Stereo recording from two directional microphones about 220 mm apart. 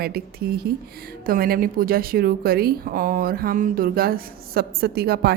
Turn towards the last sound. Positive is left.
turn(degrees=-45)  # may be behind; listen again after turning